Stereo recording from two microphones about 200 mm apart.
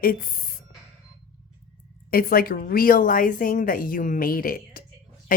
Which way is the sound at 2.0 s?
45° left (ahead or behind).